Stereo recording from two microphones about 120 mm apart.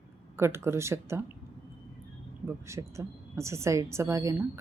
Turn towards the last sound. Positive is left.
turn(degrees=-25)  # may be behind; listen again after turning